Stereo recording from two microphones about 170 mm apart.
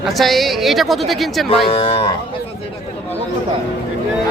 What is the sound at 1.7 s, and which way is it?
Speech, 30° left (ahead or behind).